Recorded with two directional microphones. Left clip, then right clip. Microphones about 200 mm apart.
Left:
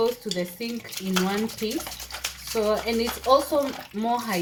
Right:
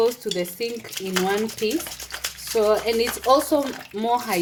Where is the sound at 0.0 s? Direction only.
55° right (ahead or behind).